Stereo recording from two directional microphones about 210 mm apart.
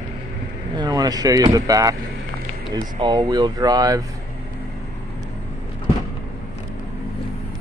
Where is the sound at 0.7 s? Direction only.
20° right (ahead or behind).